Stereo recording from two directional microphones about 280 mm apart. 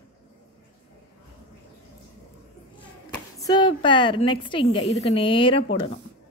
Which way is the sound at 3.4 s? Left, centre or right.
Centre.